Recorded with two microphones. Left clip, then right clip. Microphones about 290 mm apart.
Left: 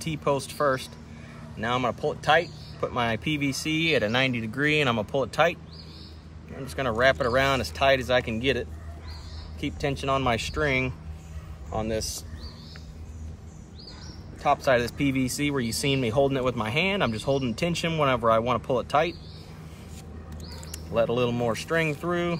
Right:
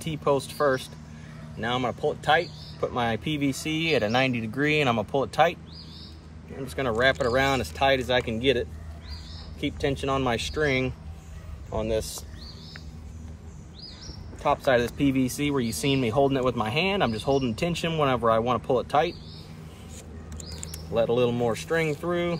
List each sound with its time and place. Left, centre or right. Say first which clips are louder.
0.0 s speech: right 2 dB; centre
6.6 s speech: left 1 dB; centre
14.4 s speech: even; centre
20.9 s speech: right 1 dB; centre